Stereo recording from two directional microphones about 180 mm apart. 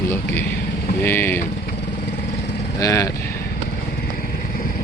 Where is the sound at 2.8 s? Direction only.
20° left (ahead or behind).